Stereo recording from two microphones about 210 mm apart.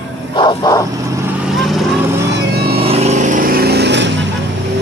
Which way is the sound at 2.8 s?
30° right (ahead or behind).